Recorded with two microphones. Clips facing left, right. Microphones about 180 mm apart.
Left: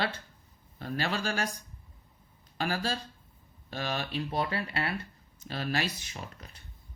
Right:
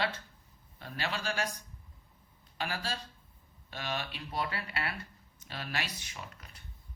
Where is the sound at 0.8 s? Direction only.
40° left (ahead or behind).